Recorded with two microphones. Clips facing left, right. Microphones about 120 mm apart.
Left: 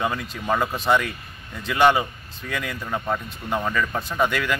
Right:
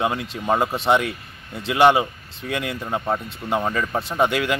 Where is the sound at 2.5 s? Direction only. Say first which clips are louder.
Right 3 dB; 20° right (ahead or behind).